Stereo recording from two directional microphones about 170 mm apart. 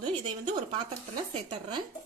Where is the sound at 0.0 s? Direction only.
30° right (ahead or behind).